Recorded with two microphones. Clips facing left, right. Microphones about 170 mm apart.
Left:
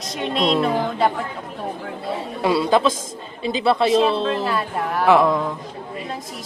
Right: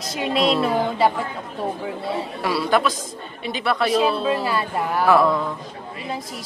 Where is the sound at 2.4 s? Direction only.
20° left (ahead or behind).